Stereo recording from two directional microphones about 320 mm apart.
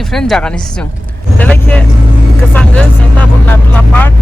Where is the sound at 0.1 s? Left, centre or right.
Centre.